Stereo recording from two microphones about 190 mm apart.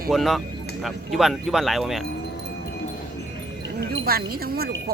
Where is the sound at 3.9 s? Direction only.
55° right (ahead or behind).